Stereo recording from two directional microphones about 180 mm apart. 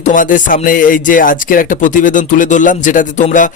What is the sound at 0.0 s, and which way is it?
Speech, 45° left (ahead or behind).